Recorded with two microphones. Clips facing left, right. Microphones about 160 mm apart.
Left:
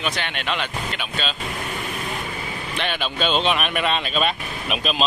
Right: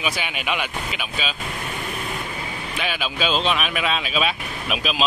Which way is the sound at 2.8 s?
5° right (ahead or behind).